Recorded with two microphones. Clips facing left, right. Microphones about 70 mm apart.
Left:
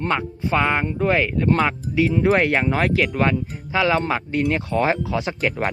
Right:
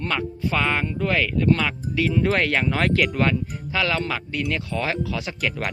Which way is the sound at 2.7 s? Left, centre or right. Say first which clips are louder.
Left 1 dB; centre.